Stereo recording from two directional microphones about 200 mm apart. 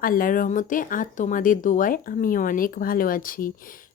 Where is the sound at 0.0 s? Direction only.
45° left (ahead or behind).